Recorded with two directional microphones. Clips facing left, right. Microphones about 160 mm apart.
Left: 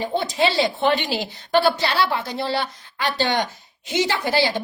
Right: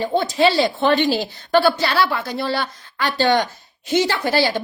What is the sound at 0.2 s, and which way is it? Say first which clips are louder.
A woman's voice: right 4 dB; 20° left (ahead or behind).